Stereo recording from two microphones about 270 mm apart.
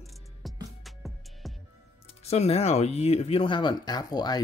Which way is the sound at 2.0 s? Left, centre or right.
Left.